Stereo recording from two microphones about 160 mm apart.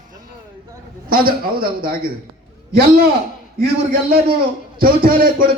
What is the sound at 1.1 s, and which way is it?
Speech, 65° right (ahead or behind).